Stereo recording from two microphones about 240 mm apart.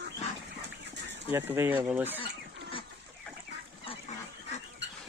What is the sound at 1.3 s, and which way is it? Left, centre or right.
Speech, centre.